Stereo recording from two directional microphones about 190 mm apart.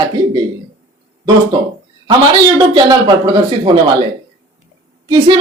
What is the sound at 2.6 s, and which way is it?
Speech, 25° right (ahead or behind).